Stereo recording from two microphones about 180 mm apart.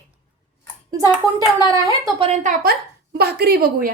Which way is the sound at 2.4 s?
50° right (ahead or behind).